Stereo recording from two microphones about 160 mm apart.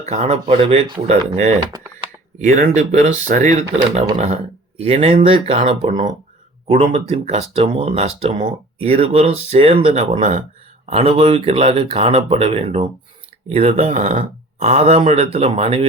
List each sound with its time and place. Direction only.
0.0 s speech: 45° right (ahead or behind)
1.7 s computer keyboard: 25° right (ahead or behind)
2.6 s speech: 45° right (ahead or behind)